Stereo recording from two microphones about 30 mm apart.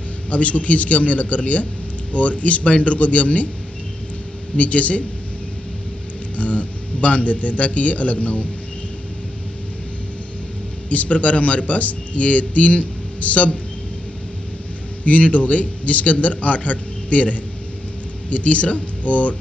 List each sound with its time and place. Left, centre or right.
0.3 s speech: left
4.6 s speech: left
6.3 s speech: left
10.9 s speech: left
15.0 s speech: left